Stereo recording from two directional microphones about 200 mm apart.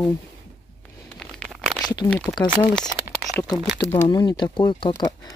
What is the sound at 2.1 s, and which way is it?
Speech, 5° left (ahead or behind).